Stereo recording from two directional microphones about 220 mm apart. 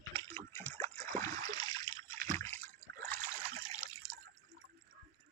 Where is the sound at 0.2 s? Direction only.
10° left (ahead or behind).